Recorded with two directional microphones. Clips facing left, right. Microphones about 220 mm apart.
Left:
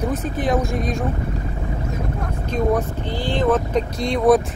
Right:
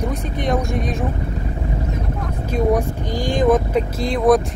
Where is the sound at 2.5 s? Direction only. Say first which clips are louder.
Right 2 dB; 10° right (ahead or behind).